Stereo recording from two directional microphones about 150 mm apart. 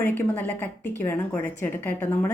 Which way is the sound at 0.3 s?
15° left (ahead or behind).